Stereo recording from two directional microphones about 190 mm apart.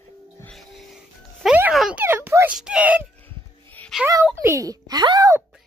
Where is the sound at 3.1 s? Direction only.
10° left (ahead or behind).